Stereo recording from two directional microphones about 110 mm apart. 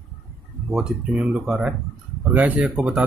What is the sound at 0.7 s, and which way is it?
Speech, 5° right (ahead or behind).